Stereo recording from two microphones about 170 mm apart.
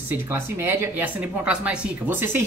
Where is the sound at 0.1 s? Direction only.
10° right (ahead or behind).